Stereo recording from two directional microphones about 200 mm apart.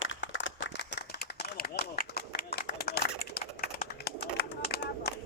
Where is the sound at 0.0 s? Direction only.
70° left (ahead or behind).